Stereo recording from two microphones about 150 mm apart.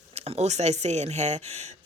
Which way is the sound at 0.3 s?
50° right (ahead or behind).